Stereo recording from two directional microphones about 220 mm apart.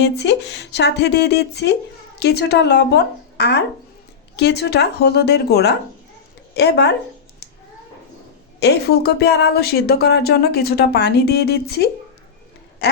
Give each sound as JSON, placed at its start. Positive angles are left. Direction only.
{"t": 0.0, "sound": "speech", "side_deg": 50}
{"t": 8.6, "sound": "speech", "side_deg": 45}
{"t": 12.8, "sound": "a sound", "side_deg": 50}